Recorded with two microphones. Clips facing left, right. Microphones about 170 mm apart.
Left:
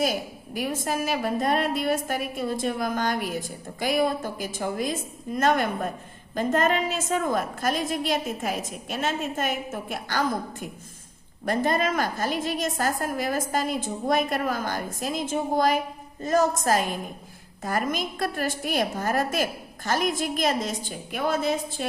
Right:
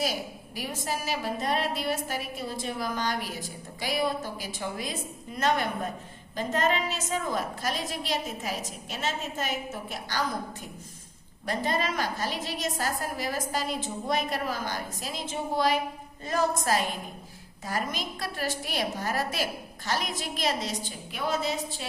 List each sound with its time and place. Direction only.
0.0 s a woman's voice: 50° left (ahead or behind)
11.4 s a woman's voice: 50° left (ahead or behind)